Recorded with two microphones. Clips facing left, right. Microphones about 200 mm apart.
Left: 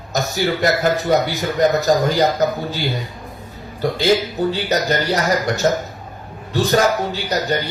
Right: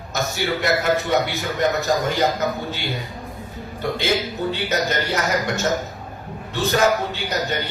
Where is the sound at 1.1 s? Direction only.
40° left (ahead or behind).